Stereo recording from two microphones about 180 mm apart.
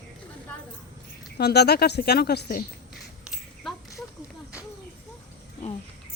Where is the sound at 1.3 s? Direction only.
65° left (ahead or behind).